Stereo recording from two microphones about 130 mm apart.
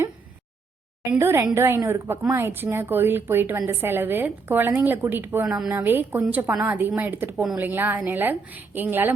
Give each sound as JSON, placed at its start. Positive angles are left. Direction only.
{"t": 1.2, "sound": "a woman's voice", "side_deg": -20}